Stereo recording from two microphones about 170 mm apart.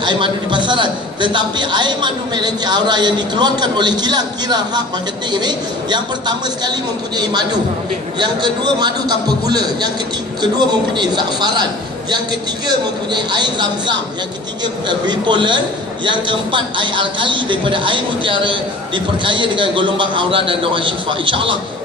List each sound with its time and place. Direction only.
0.0 s a man's voice: 30° right (ahead or behind)
12.6 s a man's voice: 25° right (ahead or behind)